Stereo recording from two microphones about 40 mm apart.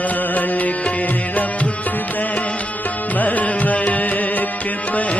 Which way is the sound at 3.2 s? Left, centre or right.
Left.